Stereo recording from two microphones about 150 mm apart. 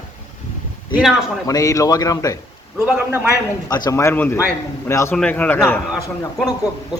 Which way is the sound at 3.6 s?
25° left (ahead or behind).